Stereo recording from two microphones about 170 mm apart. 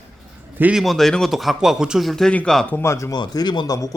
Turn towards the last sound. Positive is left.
turn(degrees=20)  # may be behind; listen again after turning